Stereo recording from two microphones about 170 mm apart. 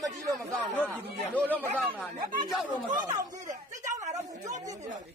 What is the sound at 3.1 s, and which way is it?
Speech, 45° right (ahead or behind).